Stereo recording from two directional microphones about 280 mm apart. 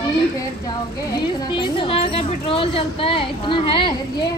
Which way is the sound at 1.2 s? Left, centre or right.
Centre.